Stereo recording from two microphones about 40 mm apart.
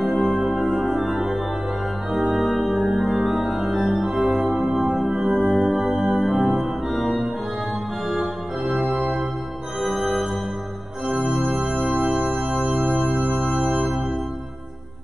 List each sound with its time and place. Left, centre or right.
0.0 s music: centre
2.3 s organ: centre
5.7 s music: centre
8.1 s organ: centre
11.5 s music: centre
11.8 s music: centre
12.1 s music: right
12.9 s music: centre